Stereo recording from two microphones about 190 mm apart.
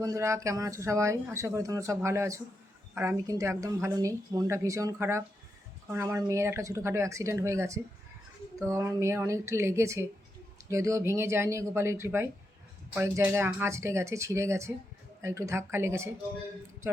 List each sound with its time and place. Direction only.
0.0 s speech: 15° right (ahead or behind)